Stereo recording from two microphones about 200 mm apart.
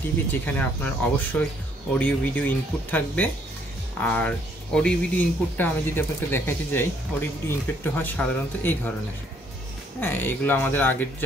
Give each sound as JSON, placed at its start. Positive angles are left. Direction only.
{"t": 0.3, "sound": "speech", "side_deg": 10}
{"t": 9.9, "sound": "speech", "side_deg": 10}